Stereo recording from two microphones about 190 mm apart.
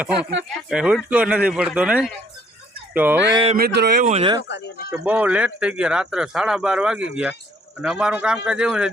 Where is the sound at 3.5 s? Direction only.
55° right (ahead or behind).